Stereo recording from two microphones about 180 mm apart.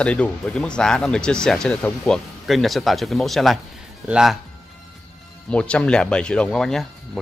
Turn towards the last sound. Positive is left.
turn(degrees=5)  # may be behind; listen again after turning